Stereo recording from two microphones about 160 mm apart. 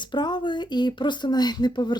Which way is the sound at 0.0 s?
30° left (ahead or behind).